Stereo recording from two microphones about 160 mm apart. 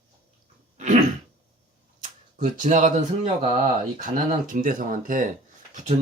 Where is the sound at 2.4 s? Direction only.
50° right (ahead or behind).